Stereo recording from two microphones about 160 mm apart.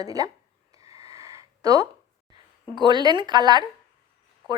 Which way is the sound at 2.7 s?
25° right (ahead or behind).